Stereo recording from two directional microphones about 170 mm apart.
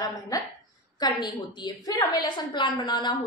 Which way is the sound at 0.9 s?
25° left (ahead or behind).